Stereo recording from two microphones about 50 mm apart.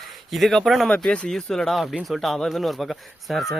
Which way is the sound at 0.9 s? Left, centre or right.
Left.